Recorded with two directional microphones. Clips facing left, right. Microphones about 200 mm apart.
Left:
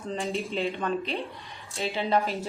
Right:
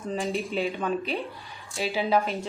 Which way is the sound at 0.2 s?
Centre (ahead or behind).